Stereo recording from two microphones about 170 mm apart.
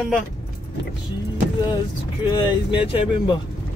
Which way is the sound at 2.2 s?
25° left (ahead or behind).